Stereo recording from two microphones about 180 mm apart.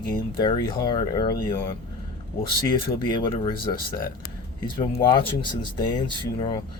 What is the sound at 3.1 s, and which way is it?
Speech, 30° left (ahead or behind).